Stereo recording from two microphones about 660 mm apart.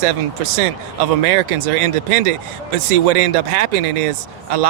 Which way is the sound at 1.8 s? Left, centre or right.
Right.